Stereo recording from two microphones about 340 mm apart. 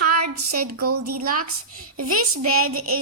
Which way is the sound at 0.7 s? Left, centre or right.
Right.